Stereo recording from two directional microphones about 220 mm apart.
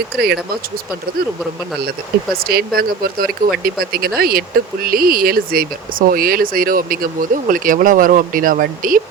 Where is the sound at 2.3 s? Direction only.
45° right (ahead or behind).